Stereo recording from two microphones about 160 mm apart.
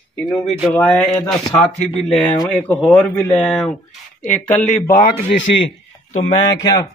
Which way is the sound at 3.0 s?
10° left (ahead or behind).